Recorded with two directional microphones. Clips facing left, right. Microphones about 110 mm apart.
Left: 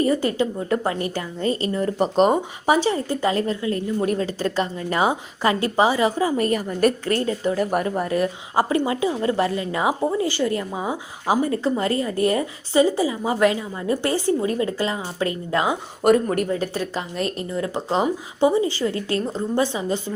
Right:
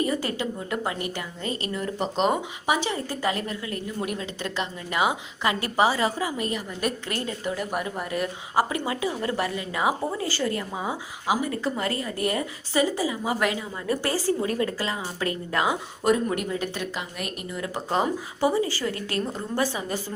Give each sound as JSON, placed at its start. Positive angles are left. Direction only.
{"t": 0.0, "sound": "a woman's voice", "side_deg": 25}
{"t": 6.3, "sound": "a woman's voice", "side_deg": 50}
{"t": 11.3, "sound": "a woman's voice", "side_deg": 35}
{"t": 16.0, "sound": "speech", "side_deg": 60}
{"t": 16.4, "sound": "a woman's voice", "side_deg": 35}